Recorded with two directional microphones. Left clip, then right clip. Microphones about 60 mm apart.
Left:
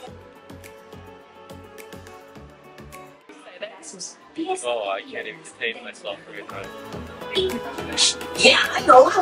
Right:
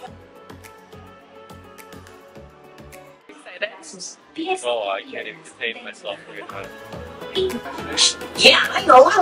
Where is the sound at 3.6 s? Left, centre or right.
Centre.